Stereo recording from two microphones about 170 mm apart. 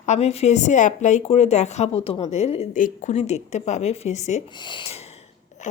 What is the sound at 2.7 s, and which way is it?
Speech, 50° left (ahead or behind).